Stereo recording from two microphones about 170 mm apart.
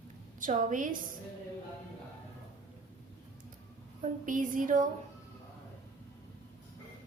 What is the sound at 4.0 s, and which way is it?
Speech, 50° right (ahead or behind).